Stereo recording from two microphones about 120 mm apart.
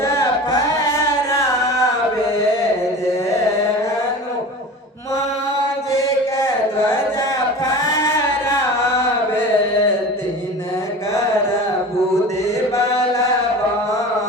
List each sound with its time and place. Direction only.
0.0 s carnatic music: 25° left (ahead or behind)
1.3 s music: 25° left (ahead or behind)
5.9 s mantra: 25° left (ahead or behind)
7.7 s a sound: 25° left (ahead or behind)